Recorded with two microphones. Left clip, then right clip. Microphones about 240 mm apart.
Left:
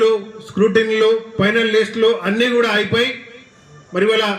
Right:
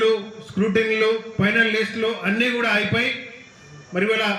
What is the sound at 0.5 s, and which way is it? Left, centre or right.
A man's voice, left.